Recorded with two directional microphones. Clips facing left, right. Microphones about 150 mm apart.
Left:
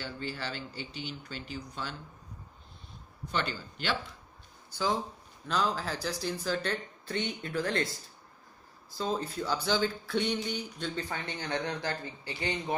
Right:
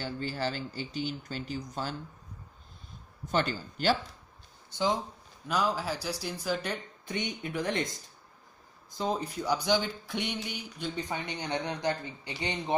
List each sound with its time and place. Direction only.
0.0 s speech: 40° right (ahead or behind)
3.3 s speech: 45° right (ahead or behind)
4.6 s speech: 20° right (ahead or behind)
5.5 s speech: 10° right (ahead or behind)